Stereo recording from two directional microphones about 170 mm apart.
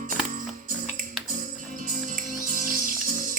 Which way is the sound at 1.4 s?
50° right (ahead or behind).